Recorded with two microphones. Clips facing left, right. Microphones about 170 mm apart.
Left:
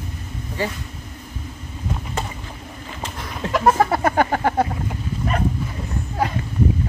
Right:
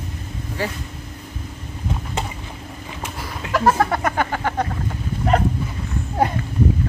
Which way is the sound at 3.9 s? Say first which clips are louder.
Left 3 dB; 35° left (ahead or behind).